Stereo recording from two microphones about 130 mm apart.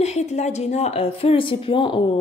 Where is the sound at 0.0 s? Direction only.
60° left (ahead or behind).